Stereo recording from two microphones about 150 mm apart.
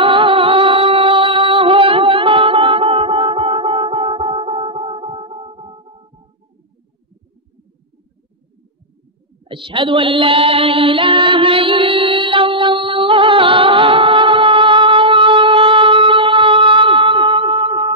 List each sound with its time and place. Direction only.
0.0 s music: 35° right (ahead or behind)
9.5 s mantra: 35° right (ahead or behind)